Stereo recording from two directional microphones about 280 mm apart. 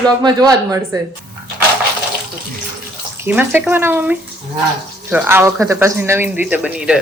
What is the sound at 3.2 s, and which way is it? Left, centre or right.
Speech, centre.